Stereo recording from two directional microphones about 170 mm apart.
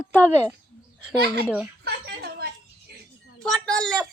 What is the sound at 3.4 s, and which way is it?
Speech, 5° left (ahead or behind).